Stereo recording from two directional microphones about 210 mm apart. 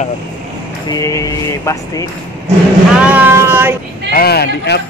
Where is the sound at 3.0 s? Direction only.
5° right (ahead or behind).